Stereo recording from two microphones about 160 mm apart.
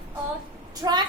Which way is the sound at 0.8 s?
25° right (ahead or behind).